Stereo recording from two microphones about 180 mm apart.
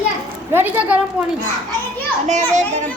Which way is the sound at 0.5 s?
10° right (ahead or behind).